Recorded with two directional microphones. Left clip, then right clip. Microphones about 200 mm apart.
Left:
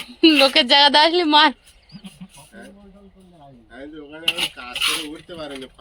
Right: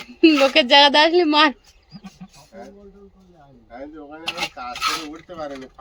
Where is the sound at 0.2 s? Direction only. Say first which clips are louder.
Left 1 dB; 5° right (ahead or behind).